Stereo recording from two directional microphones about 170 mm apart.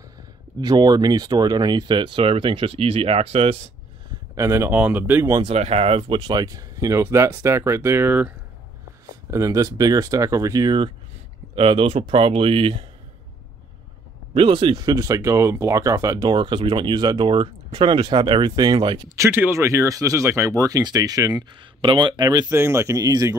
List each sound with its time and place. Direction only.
0.6 s speech: 25° right (ahead or behind)
4.4 s speech: 15° right (ahead or behind)
5.4 s speech: 35° right (ahead or behind); by 8.3 s 10° right (ahead or behind)
9.3 s speech: 20° right (ahead or behind)
14.3 s speech: 30° right (ahead or behind)
19.1 s speech: 15° right (ahead or behind)